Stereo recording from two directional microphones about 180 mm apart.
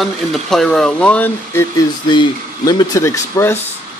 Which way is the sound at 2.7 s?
20° left (ahead or behind).